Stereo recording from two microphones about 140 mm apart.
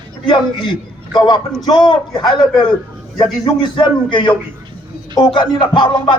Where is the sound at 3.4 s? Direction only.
35° left (ahead or behind).